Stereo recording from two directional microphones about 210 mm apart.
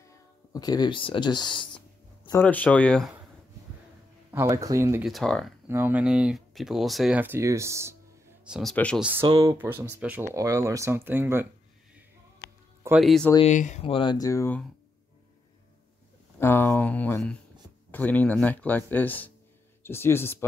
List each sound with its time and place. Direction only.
0.5 s speech: 20° left (ahead or behind)
2.2 s speech: 10° left (ahead or behind)
4.3 s speech: 15° right (ahead or behind)
5.0 s speech: centre (ahead or behind)
5.7 s speech: 10° right (ahead or behind)
8.5 s speech: centre (ahead or behind)
9.2 s speech: 15° right (ahead or behind)
13.0 s speech: centre (ahead or behind)
13.5 s speech: 35° left (ahead or behind); by 14.7 s 10° left (ahead or behind)
16.3 s speech: 10° left (ahead or behind)